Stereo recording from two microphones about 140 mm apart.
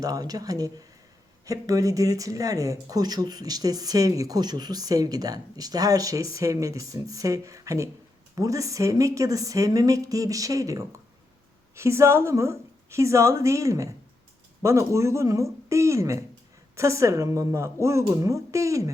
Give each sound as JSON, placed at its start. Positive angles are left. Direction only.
{"t": 0.0, "sound": "speech", "side_deg": -25}